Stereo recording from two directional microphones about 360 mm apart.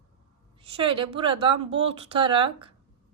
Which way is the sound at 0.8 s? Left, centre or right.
Centre.